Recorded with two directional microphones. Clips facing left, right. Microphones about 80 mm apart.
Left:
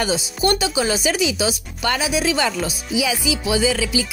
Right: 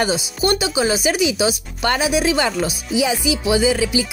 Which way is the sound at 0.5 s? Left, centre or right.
Centre.